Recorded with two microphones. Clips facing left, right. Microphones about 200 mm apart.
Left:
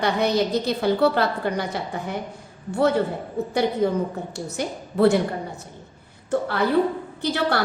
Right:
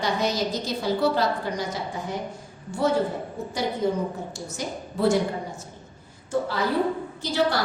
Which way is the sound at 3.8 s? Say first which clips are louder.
Left 3 dB; 60° left (ahead or behind).